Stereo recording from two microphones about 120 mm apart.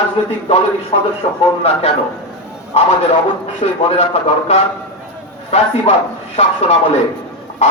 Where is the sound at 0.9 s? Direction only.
60° left (ahead or behind).